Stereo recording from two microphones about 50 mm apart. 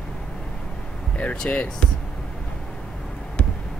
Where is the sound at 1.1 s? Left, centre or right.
Left.